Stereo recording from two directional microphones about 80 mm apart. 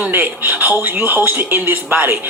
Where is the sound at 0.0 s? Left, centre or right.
Right.